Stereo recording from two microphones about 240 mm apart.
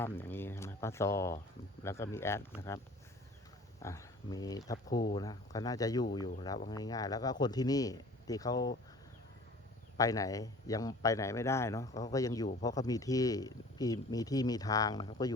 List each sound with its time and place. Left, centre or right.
0.0 s speech: centre
3.8 s speech: centre
10.0 s speech: centre